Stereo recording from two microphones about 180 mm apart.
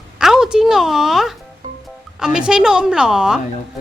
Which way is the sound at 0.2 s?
5° right (ahead or behind).